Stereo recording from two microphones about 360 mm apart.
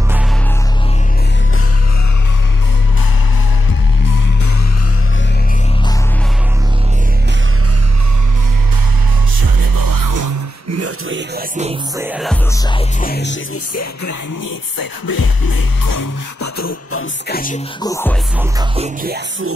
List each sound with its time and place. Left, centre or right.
9.4 s music: right
10.8 s a sound: right
12.0 s music: centre
12.7 s music: left
14.8 s music: left
16.5 s a sound: left
17.3 s music: left
17.8 s music: centre
18.4 s music: centre